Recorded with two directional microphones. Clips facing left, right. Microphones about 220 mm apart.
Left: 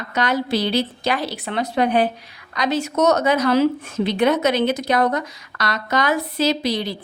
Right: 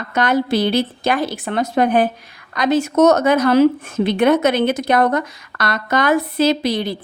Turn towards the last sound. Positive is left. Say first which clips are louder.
# right 3 dB
turn(degrees=-55)  # may be behind; listen again after turning